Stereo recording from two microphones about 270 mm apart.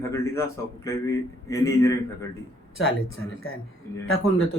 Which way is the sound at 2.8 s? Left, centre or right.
Left.